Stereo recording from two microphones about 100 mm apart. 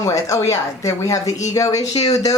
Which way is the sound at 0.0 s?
30° left (ahead or behind).